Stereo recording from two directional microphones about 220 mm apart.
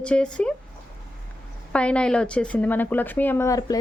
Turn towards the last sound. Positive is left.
turn(degrees=15)  # may be behind; listen again after turning